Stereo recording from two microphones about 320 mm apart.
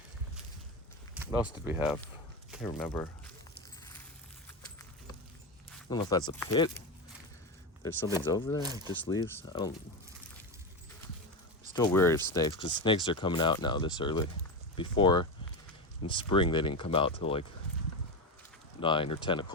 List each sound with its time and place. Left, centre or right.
1.1 s a sound: centre
1.6 s speech: centre
5.9 s speech: centre
7.8 s speech: centre
8.6 s speech: centre
9.0 s speech: centre
11.8 s speech: centre
18.8 s speech: centre